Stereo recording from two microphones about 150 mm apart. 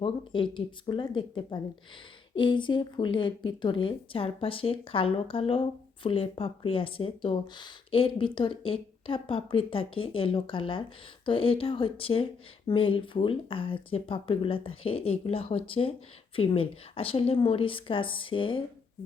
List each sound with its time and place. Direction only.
0.0 s speech: 35° left (ahead or behind)